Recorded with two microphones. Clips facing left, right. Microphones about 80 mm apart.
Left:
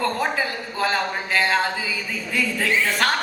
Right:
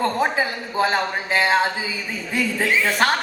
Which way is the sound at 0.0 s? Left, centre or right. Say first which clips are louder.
Right 2 dB; right.